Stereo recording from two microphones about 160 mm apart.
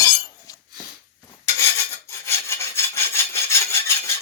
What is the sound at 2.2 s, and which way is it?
Rub, 15° left (ahead or behind).